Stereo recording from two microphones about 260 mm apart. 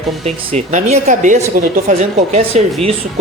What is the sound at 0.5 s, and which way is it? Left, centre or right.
Speech, right.